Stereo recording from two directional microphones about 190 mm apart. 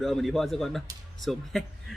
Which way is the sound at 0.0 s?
Centre (ahead or behind).